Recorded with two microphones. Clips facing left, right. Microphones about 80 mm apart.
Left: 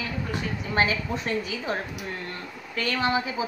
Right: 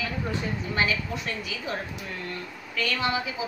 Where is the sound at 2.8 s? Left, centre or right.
Left.